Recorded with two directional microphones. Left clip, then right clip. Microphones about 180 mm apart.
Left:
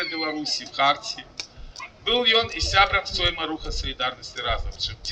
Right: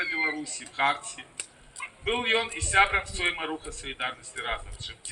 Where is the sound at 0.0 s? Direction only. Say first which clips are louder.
Left 1 dB; 30° left (ahead or behind).